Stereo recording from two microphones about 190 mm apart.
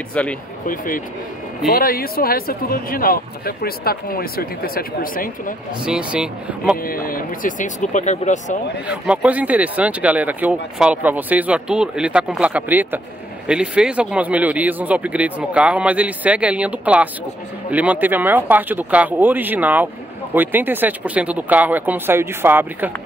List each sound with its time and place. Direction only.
0.1 s speech: 5° left (ahead or behind)
0.7 s a man's voice: 45° left (ahead or behind)
5.9 s speech: 5° right (ahead or behind)
6.8 s speech: 50° left (ahead or behind)
8.8 s speech: 5° right (ahead or behind)